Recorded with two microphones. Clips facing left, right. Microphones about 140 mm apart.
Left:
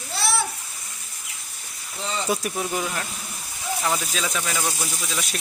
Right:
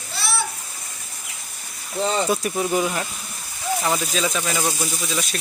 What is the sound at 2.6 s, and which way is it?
Speech, 10° right (ahead or behind).